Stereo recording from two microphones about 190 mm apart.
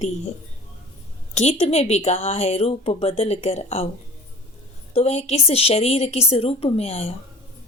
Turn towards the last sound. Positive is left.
turn(degrees=35)  # may be behind; listen again after turning